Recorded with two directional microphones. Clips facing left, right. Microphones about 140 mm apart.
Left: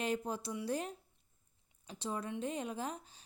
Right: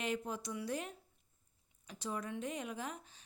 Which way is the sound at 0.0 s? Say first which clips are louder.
Left 2 dB; 35° left (ahead or behind).